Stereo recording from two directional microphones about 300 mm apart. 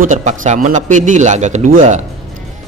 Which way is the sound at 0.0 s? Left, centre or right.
Right.